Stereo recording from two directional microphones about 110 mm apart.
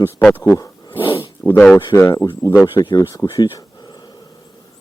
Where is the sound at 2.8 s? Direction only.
40° left (ahead or behind).